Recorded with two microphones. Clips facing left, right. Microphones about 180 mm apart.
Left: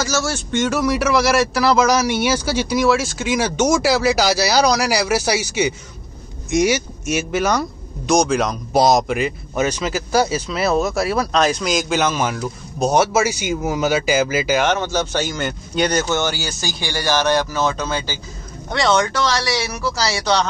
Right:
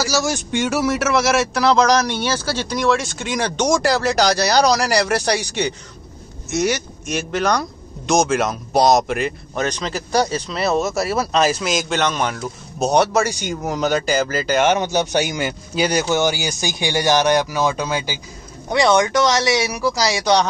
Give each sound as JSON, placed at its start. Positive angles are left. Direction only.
{"t": 0.0, "sound": "speech", "side_deg": -15}
{"t": 14.7, "sound": "a man's voice", "side_deg": -15}